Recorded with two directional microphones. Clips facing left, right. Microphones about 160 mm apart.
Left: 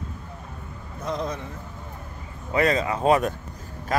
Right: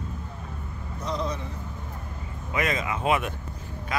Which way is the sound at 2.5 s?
35° left (ahead or behind).